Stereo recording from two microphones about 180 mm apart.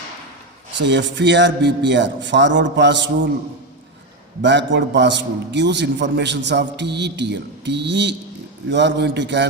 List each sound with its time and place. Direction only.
0.8 s a man's voice: 80° right
4.4 s a man's voice: 80° right